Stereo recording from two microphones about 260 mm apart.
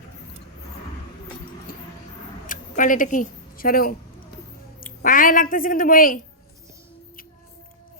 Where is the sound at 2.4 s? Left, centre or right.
Left.